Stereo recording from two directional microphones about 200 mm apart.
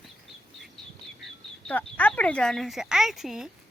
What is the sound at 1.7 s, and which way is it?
Speech, 5° left (ahead or behind).